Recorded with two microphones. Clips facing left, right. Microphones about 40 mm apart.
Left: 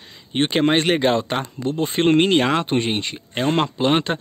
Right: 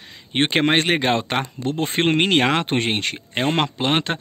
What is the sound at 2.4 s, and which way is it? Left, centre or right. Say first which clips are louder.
Speech: even; right.